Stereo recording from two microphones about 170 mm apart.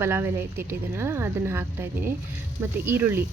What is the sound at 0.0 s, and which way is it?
Speech, 15° right (ahead or behind).